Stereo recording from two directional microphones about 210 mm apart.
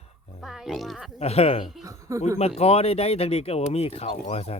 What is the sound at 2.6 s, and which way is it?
Speech, 30° left (ahead or behind).